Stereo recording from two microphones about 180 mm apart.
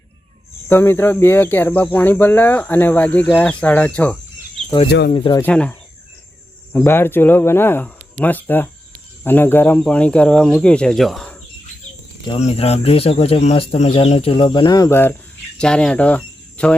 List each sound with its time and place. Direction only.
0.7 s speech: 10° left (ahead or behind)
4.9 s speech: 65° left (ahead or behind)
5.1 s speech: 25° left (ahead or behind)
5.4 s speech: 10° left (ahead or behind)
6.7 s speech: 10° left (ahead or behind)
12.3 s speech: 35° left (ahead or behind); by 16.7 s 5° left (ahead or behind)